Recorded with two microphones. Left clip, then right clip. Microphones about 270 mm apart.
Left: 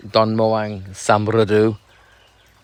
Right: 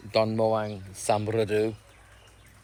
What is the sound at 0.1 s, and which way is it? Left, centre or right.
Speech, left.